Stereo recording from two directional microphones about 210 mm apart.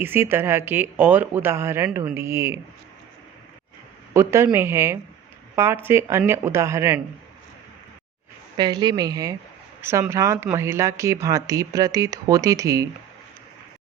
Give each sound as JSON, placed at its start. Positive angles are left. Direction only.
{"t": 0.0, "sound": "speech", "side_deg": -10}
{"t": 4.1, "sound": "speech", "side_deg": -15}
{"t": 8.5, "sound": "speech", "side_deg": -20}